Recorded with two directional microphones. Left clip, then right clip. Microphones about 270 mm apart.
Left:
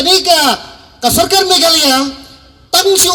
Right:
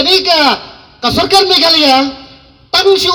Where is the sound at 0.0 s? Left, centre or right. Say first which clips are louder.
Even; left.